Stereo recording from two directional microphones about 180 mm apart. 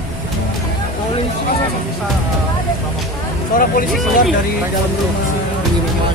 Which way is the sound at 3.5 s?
50° left (ahead or behind).